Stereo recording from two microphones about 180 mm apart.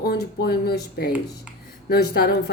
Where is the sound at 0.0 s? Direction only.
60° left (ahead or behind).